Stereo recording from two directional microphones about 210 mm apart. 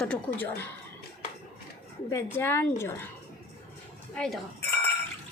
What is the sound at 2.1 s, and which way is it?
A woman's voice, 10° left (ahead or behind).